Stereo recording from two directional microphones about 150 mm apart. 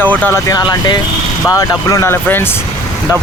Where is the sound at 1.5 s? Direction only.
20° left (ahead or behind).